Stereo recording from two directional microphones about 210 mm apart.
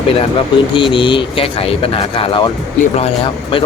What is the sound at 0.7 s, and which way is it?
Speech, 25° left (ahead or behind).